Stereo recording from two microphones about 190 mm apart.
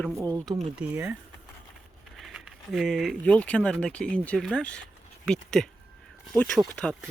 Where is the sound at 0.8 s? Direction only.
5° right (ahead or behind).